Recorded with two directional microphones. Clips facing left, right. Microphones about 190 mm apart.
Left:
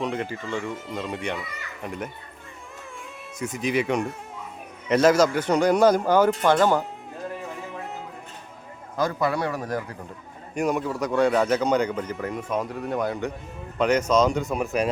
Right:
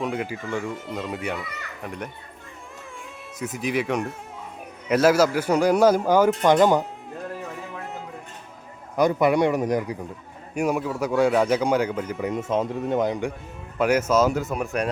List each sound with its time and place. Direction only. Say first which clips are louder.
0.0 s speech: right 1 dB; 5° right (ahead or behind)
3.3 s a man's voice: left 1 dB; centre (ahead or behind)
7.3 s music: even; centre (ahead or behind)
9.0 s a man's voice: right 6 dB; 20° right (ahead or behind)
10.5 s a man's voice: right 1 dB; 5° right (ahead or behind)
12.2 s a man's voice: right 6 dB; 25° right (ahead or behind); by 14.8 s centre (ahead or behind)